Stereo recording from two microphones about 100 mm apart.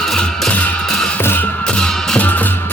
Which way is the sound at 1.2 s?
20° left (ahead or behind).